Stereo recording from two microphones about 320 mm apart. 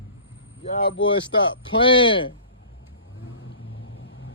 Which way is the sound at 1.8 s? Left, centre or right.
Centre.